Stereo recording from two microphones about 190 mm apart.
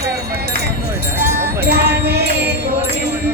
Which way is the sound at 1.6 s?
60° right (ahead or behind).